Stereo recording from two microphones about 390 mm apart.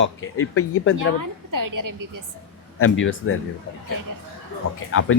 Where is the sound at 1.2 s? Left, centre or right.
Right.